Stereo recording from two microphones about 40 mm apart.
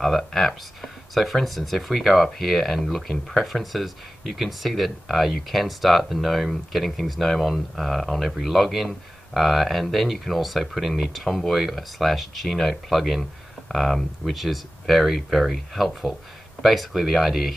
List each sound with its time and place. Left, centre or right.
0.0 s speech: centre